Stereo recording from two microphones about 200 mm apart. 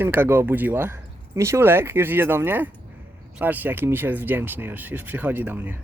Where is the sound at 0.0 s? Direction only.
10° right (ahead or behind).